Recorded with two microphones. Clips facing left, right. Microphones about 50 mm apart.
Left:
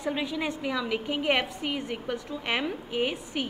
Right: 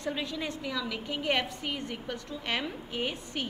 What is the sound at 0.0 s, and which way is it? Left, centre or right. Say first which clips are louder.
A woman's voice: left 4 dB; centre.